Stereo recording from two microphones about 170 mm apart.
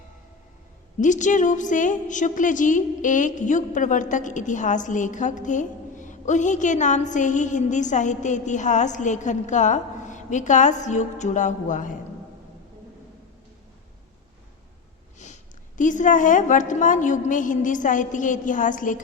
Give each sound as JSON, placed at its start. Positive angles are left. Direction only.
{"t": 0.9, "sound": "a woman's voice", "side_deg": 45}
{"t": 15.2, "sound": "sniff", "side_deg": 45}
{"t": 15.8, "sound": "a woman's voice", "side_deg": 50}